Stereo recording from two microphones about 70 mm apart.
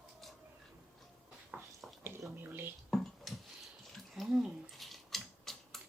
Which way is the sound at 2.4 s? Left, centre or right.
Right.